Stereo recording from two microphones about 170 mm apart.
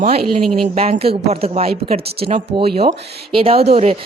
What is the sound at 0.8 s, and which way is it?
Speech, 35° right (ahead or behind).